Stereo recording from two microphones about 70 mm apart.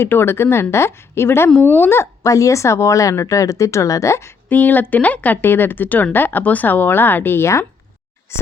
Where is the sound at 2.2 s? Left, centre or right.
Left.